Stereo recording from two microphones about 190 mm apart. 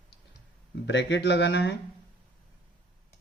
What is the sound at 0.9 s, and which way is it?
Speech, 65° left (ahead or behind).